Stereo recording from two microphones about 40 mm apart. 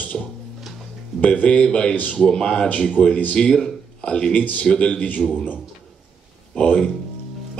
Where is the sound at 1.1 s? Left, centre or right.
Left.